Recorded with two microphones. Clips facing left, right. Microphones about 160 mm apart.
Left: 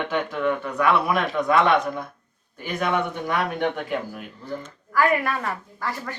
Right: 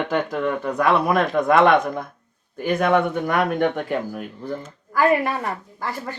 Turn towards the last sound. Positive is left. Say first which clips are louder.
# right 1 dB
turn(degrees=-25)  # may be behind; listen again after turning